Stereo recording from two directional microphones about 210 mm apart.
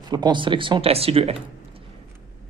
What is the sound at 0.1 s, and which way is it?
A man's voice, 20° right (ahead or behind).